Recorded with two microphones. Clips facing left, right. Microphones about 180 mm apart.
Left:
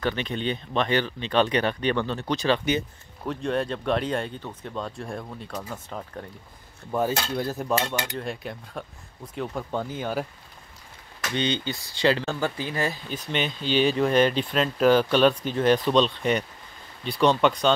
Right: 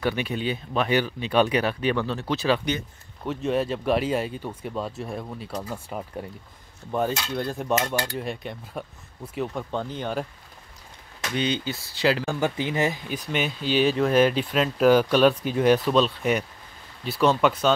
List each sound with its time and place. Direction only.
0.0 s speech: 10° right (ahead or behind)
6.9 s speech: 5° left (ahead or behind)
7.7 s cutlery: 25° left (ahead or behind)
8.2 s speech: centre (ahead or behind)
11.3 s speech: 5° right (ahead or behind)
12.4 s speech: 20° right (ahead or behind)